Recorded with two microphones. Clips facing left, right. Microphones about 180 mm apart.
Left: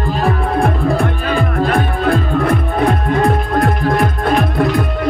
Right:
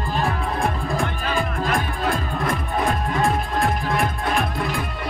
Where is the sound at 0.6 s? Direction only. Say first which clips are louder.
Left 8 dB; 60° left (ahead or behind).